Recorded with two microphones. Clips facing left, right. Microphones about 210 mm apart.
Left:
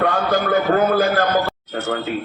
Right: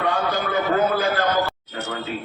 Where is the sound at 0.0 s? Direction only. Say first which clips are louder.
Left 4 dB; 50° left (ahead or behind).